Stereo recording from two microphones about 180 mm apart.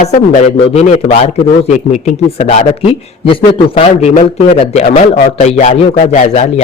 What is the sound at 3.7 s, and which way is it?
Speech, 30° left (ahead or behind).